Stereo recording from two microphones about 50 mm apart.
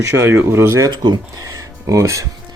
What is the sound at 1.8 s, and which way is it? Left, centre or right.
Speech, right.